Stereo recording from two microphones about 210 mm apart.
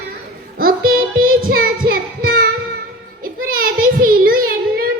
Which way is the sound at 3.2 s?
45° right (ahead or behind).